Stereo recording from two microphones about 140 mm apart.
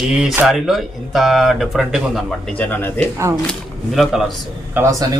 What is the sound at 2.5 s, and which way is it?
Speech, 10° left (ahead or behind).